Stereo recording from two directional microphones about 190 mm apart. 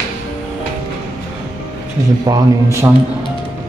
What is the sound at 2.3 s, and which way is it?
Speech, 15° right (ahead or behind).